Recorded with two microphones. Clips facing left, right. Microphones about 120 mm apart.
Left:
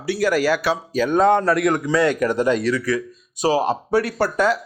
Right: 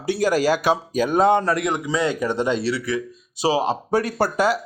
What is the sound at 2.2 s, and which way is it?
Speech, 25° right (ahead or behind).